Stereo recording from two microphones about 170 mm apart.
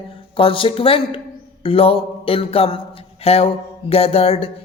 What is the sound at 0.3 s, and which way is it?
A man's voice, 30° left (ahead or behind).